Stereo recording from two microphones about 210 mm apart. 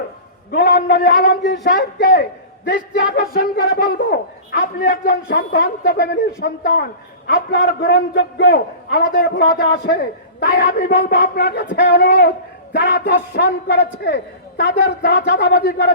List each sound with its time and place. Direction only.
0.5 s a man's voice: 45° left (ahead or behind)